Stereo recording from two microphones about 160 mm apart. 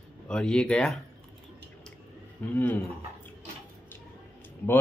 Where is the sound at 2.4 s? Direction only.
10° left (ahead or behind).